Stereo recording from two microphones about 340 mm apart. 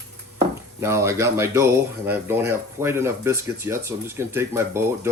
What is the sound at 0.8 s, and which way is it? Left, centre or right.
Speech, centre.